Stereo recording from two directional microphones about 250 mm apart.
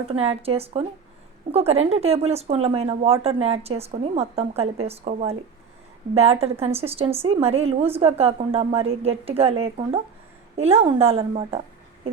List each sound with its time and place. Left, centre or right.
0.1 s a woman's voice: right